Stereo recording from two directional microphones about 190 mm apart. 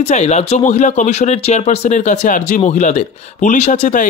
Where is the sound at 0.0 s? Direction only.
35° left (ahead or behind).